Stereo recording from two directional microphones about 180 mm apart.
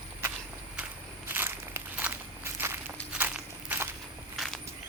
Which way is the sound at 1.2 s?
10° right (ahead or behind).